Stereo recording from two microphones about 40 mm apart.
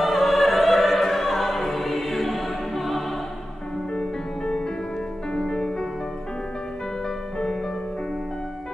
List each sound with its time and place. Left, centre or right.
0.0 s music: centre
3.9 s music: left